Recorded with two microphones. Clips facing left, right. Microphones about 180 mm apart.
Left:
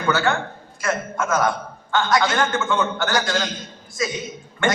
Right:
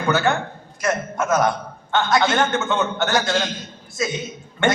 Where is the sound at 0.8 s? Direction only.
20° right (ahead or behind).